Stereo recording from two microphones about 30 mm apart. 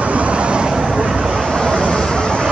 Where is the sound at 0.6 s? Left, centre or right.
Right.